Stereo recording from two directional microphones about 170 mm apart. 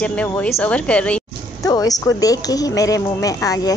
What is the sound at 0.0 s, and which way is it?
Speech, 5° left (ahead or behind).